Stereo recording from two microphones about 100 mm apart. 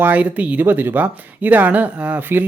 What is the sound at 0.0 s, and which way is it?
Speech, 15° right (ahead or behind).